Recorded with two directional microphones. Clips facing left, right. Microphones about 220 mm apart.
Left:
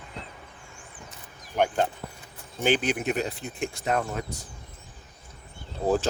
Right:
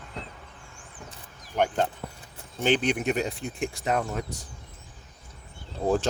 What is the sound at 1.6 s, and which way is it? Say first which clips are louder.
Speech: left 1 dB; 10° left (ahead or behind).